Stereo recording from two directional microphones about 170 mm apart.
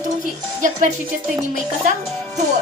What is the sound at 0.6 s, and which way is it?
Speech, 45° right (ahead or behind).